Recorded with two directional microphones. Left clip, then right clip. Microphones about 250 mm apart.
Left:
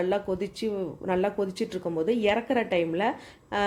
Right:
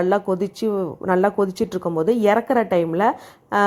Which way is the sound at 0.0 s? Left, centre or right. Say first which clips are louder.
Right 8 dB; centre.